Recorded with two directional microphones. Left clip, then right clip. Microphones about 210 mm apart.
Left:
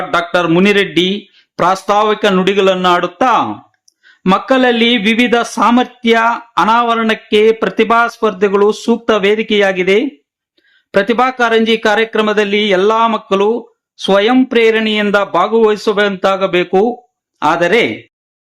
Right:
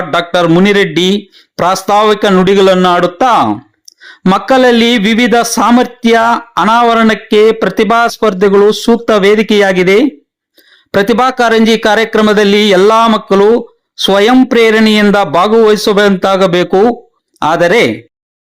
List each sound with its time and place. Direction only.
0.1 s speech: 25° right (ahead or behind)